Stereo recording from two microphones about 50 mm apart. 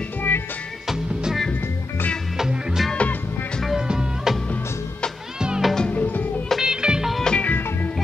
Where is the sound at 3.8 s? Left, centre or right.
Centre.